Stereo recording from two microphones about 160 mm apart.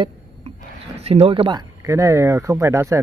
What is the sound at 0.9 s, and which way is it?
Speech, 40° right (ahead or behind).